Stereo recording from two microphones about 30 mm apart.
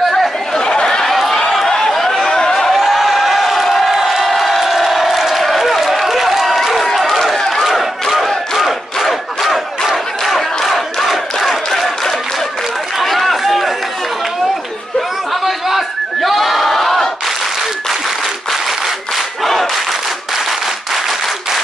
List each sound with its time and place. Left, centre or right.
0.5 s chatter: left
1.0 s run: centre
1.7 s a sound: centre
2.7 s crowd: centre
5.3 s applause: centre
6.0 s a sound: centre
7.6 s battle cry: centre
9.0 s crowd: centre
10.2 s battle cry: centre
13.0 s run: centre
15.0 s a sound: centre
19.1 s battle cry: centre